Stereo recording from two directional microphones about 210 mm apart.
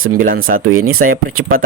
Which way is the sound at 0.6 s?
80° right.